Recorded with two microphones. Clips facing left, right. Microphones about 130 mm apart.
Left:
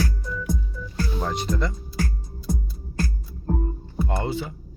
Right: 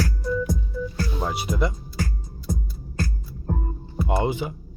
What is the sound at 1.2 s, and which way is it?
Speech, 5° right (ahead or behind).